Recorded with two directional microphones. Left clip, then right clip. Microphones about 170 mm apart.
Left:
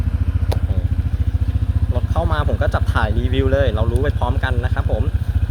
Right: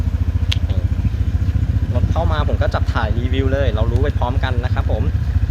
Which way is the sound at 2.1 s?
25° left (ahead or behind).